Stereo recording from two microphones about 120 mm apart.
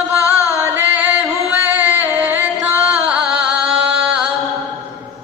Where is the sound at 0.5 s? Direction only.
20° right (ahead or behind).